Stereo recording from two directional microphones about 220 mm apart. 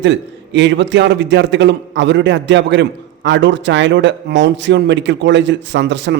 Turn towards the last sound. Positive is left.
turn(degrees=-55)  # may be behind; listen again after turning